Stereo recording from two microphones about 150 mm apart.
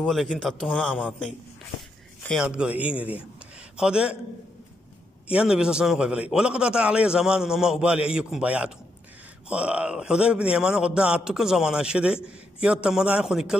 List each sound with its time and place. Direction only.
0.0 s a man's voice: 5° left (ahead or behind)
2.2 s speech: 5° right (ahead or behind)
5.3 s a man's voice: 5° right (ahead or behind)